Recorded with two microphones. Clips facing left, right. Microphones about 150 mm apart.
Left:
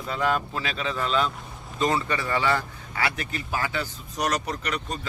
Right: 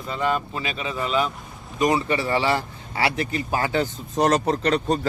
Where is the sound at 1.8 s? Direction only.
20° right (ahead or behind).